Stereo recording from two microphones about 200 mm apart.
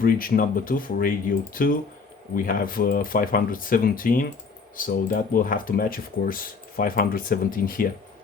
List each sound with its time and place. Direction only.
0.0 s speech: 45° left (ahead or behind)
2.3 s speech: 45° left (ahead or behind)